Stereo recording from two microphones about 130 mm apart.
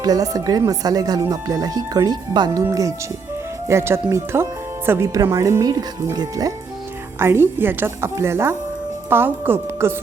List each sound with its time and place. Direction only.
0.0 s speech: 30° right (ahead or behind)